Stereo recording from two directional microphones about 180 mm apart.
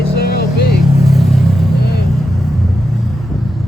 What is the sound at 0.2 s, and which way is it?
Vehicle, 60° left (ahead or behind).